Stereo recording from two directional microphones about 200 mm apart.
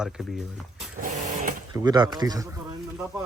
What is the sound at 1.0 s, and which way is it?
Sewing machine, 40° right (ahead or behind).